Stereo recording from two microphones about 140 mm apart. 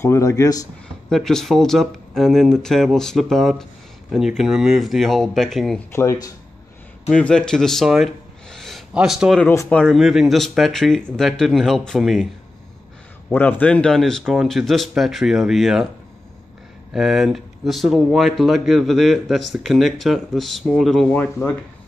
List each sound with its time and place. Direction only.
0.0 s speech: 20° left (ahead or behind)
1.1 s speech: 5° left (ahead or behind)
7.1 s speech: 5° left (ahead or behind)
13.3 s speech: 10° left (ahead or behind)
16.9 s speech: centre (ahead or behind)